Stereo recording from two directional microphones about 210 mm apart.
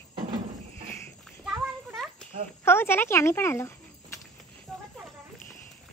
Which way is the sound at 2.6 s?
10° left (ahead or behind).